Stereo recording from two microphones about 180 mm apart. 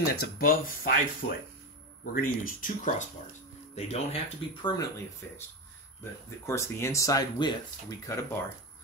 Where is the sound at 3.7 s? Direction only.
35° left (ahead or behind).